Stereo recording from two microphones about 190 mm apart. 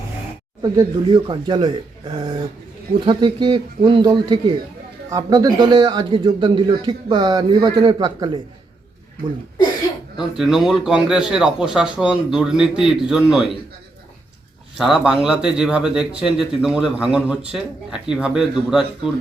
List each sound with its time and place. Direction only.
0.6 s speech: 20° right (ahead or behind)
3.1 s speech: 25° right (ahead or behind)
10.2 s speech: 5° right (ahead or behind)
14.8 s speech: 5° right (ahead or behind)